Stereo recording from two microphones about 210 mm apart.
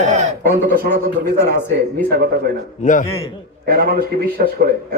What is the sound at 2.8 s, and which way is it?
Speech, 35° left (ahead or behind).